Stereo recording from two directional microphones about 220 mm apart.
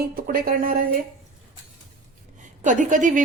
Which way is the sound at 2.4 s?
35° right (ahead or behind).